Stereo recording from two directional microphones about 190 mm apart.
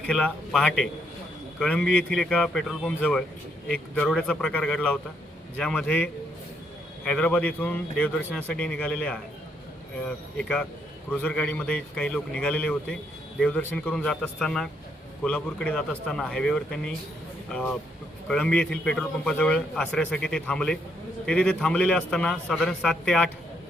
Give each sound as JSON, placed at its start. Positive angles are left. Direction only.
{"t": 0.0, "sound": "a man's voice", "side_deg": 5}
{"t": 18.3, "sound": "a man's voice", "side_deg": 5}